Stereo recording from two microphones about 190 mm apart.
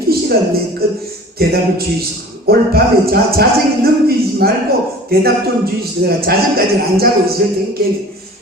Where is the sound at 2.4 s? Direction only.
55° right (ahead or behind).